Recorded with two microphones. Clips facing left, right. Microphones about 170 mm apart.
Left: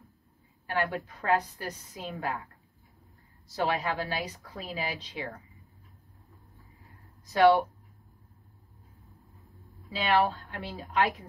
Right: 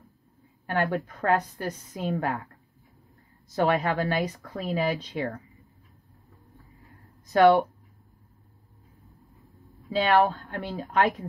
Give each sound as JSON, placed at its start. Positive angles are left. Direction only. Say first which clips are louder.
{"t": 0.7, "sound": "a woman's voice", "louder": "right 4 dB", "side_deg": -50}
{"t": 3.5, "sound": "a woman's voice", "louder": "right 5 dB", "side_deg": -55}
{"t": 9.9, "sound": "a woman's voice", "louder": "right 4 dB", "side_deg": -50}